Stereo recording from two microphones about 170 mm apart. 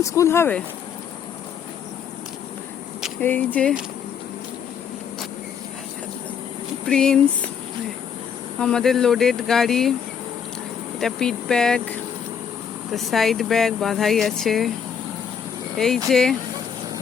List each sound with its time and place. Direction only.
0.0 s speech: 20° left (ahead or behind)
3.2 s speech: 10° left (ahead or behind)
6.8 s speech: 5° left (ahead or behind)
8.5 s speech: 5° left (ahead or behind)
11.0 s speech: 5° left (ahead or behind)
16.0 s speech: centre (ahead or behind)